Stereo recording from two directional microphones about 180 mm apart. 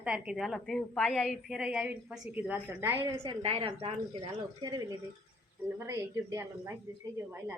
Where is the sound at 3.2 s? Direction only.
30° right (ahead or behind); by 7.5 s 10° right (ahead or behind).